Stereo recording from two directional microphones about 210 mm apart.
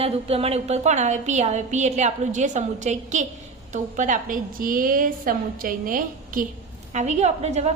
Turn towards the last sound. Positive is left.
turn(degrees=-30)  # may be behind; listen again after turning